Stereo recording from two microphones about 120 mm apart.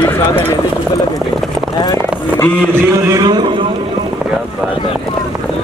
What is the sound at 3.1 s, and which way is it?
Speech, 35° right (ahead or behind).